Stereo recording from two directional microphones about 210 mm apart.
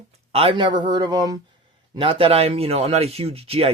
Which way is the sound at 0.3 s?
25° right (ahead or behind).